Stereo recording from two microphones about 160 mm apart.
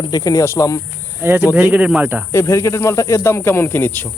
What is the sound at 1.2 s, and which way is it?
Speech, 15° right (ahead or behind).